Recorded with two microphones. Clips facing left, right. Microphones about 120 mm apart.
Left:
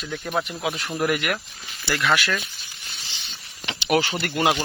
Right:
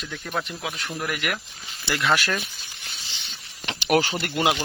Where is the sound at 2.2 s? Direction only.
35° right (ahead or behind).